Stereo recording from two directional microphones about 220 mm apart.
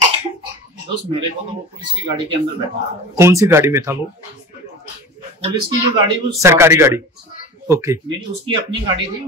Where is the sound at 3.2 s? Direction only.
10° right (ahead or behind).